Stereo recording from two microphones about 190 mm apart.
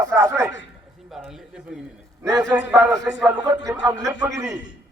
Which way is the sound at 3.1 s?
5° right (ahead or behind).